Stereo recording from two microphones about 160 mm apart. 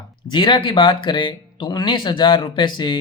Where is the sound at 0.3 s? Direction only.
30° left (ahead or behind).